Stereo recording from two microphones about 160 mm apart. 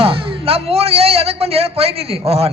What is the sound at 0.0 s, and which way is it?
A man's voice, 35° right (ahead or behind).